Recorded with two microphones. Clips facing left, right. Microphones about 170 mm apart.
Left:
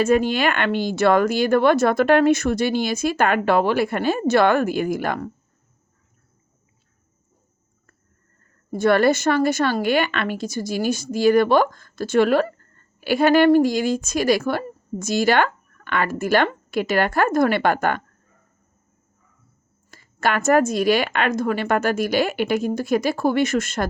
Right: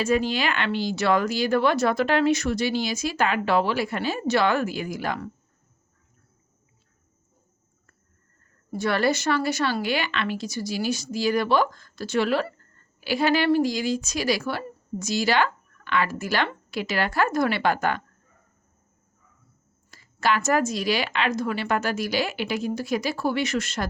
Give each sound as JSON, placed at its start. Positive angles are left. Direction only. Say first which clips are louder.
{"t": 0.0, "sound": "speech", "louder": "left 5 dB", "side_deg": 55}
{"t": 8.7, "sound": "speech", "louder": "left 6 dB", "side_deg": 50}
{"t": 19.9, "sound": "speech", "louder": "left 2 dB", "side_deg": 55}